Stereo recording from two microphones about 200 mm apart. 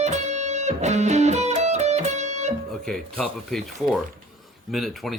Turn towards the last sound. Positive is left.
turn(degrees=0)  # may be behind; listen again after turning